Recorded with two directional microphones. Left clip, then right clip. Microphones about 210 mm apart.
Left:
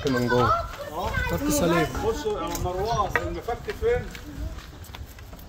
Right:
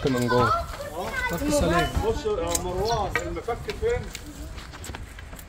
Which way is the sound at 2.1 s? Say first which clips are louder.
Right 1 dB; 60° left (ahead or behind).